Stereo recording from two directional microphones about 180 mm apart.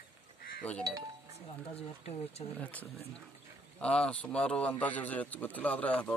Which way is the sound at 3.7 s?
5° left (ahead or behind).